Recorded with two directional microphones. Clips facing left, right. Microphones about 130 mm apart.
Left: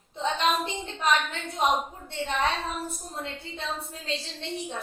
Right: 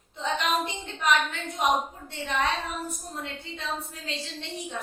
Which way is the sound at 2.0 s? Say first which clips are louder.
Left 2 dB; 30° left (ahead or behind).